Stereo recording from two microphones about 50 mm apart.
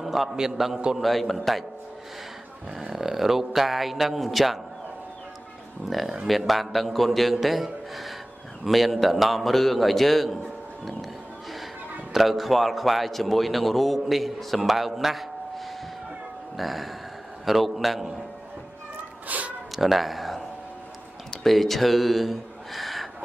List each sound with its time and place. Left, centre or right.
0.0 s a man's voice: centre
2.8 s a man's voice: centre
5.9 s a man's voice: centre
12.1 s a man's voice: centre
19.2 s a sound: right
19.7 s speech: centre
21.5 s speech: centre